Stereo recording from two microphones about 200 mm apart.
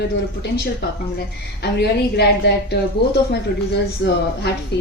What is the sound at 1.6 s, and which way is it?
A woman's voice, 55° left (ahead or behind).